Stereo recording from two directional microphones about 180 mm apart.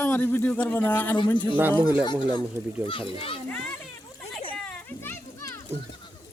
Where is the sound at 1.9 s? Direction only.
25° left (ahead or behind).